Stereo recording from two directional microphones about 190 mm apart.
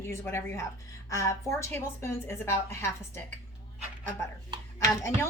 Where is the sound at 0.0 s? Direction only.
15° left (ahead or behind).